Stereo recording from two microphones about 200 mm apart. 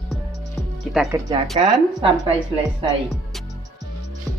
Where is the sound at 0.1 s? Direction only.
Centre (ahead or behind).